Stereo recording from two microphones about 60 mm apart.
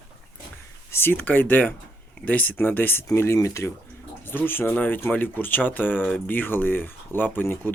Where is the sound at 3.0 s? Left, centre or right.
Left.